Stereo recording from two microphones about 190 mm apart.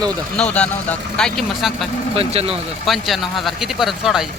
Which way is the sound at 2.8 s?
Centre (ahead or behind).